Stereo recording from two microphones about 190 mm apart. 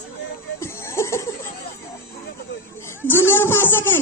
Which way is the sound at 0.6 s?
15° left (ahead or behind).